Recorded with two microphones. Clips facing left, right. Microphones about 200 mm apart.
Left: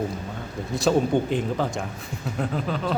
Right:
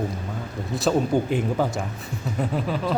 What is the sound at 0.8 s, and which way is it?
A man's voice, 5° right (ahead or behind).